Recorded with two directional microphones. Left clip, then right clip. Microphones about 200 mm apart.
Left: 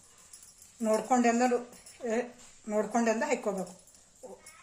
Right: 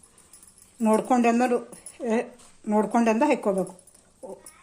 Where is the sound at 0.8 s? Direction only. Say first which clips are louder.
Right 5 dB; 40° right (ahead or behind).